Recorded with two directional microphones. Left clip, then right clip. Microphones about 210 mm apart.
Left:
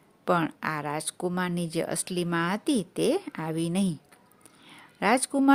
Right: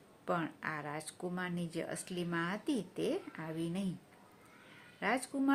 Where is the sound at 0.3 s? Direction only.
50° left (ahead or behind).